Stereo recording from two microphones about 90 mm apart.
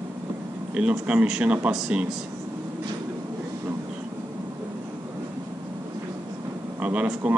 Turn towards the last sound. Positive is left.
turn(degrees=-15)  # may be behind; listen again after turning